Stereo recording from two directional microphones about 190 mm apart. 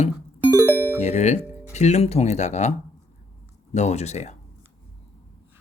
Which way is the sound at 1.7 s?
35° left (ahead or behind).